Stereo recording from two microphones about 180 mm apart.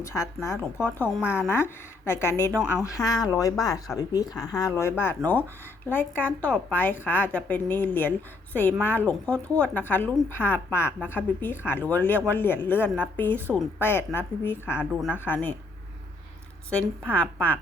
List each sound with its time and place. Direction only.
0.0 s a woman's voice: 15° left (ahead or behind)
2.6 s speech: 5° right (ahead or behind)
2.8 s a woman's voice: 20° left (ahead or behind)
14.8 s a woman's voice: 5° right (ahead or behind)
15.2 s a woman's voice: 10° left (ahead or behind)
16.6 s a woman's voice: 5° left (ahead or behind)